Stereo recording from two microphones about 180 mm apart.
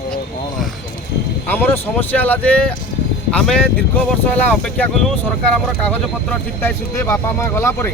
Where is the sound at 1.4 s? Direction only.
10° left (ahead or behind).